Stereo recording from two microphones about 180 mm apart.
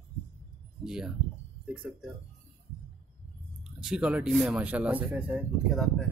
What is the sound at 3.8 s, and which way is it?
Speech, 5° right (ahead or behind).